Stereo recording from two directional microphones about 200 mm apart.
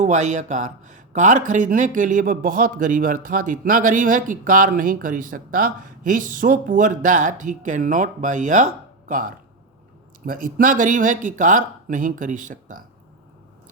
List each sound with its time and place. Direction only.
0.0 s speech: 35° right (ahead or behind)
10.2 s speech: 45° right (ahead or behind)